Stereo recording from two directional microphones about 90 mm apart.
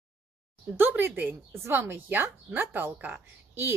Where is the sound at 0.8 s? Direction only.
25° right (ahead or behind).